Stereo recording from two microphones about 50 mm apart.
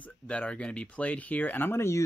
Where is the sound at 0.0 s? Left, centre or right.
Left.